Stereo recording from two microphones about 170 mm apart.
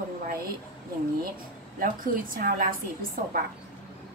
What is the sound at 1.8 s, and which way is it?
Speech, 55° right (ahead or behind).